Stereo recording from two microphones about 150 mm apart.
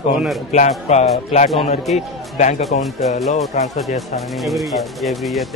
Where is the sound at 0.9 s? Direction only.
50° left (ahead or behind).